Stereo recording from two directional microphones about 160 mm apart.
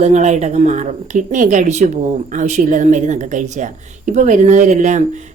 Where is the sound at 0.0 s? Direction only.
45° right (ahead or behind).